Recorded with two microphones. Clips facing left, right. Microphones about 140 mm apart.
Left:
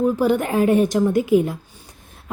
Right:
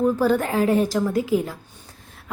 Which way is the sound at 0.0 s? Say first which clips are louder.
Left 1 dB; 15° left (ahead or behind).